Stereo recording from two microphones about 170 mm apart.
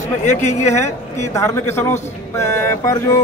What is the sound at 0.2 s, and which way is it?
Speech, 45° left (ahead or behind).